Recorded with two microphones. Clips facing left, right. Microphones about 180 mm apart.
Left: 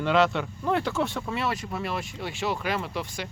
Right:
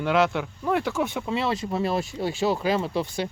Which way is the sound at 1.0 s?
15° right (ahead or behind).